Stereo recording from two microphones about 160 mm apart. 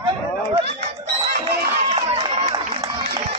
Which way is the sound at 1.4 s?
40° right (ahead or behind).